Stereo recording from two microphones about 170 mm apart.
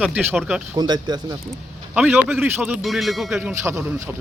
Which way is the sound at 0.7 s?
25° right (ahead or behind).